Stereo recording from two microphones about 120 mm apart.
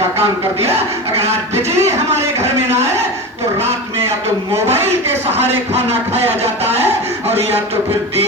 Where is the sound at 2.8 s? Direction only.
25° right (ahead or behind).